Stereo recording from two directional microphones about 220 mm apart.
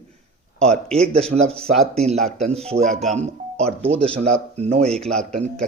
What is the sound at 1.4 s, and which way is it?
A man's voice, 5° left (ahead or behind).